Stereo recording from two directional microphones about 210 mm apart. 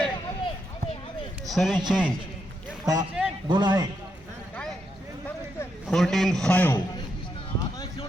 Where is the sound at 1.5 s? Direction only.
Centre (ahead or behind).